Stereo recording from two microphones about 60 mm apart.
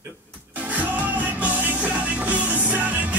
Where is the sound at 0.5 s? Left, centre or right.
Right.